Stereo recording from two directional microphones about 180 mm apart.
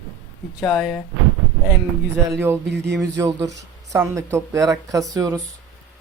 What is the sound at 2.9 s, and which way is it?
Speech, 15° right (ahead or behind).